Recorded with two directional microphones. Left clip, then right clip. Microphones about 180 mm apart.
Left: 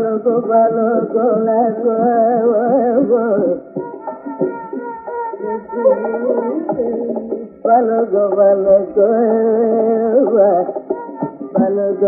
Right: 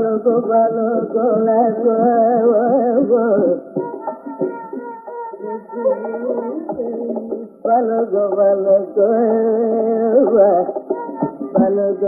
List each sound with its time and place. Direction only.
0.0 s music: 35° left (ahead or behind)
5.5 s music: 35° left (ahead or behind)